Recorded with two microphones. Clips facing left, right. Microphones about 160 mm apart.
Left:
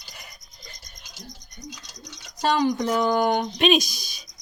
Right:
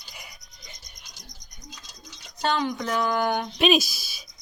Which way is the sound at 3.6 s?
5° right (ahead or behind).